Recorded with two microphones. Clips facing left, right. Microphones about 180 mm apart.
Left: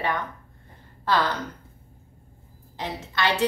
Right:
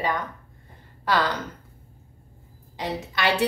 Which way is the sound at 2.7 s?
15° right (ahead or behind).